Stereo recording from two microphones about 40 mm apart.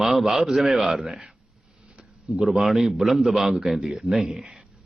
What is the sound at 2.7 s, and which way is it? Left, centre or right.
A man's voice, centre.